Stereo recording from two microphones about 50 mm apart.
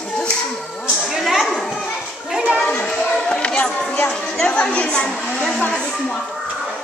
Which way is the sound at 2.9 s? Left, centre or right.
Centre.